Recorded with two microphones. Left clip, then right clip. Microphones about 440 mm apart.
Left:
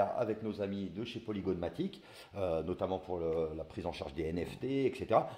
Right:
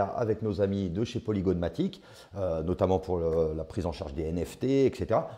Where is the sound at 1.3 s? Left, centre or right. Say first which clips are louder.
Right 7 dB; right.